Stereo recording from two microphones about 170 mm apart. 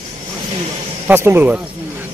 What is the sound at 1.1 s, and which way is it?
Speech, 10° right (ahead or behind).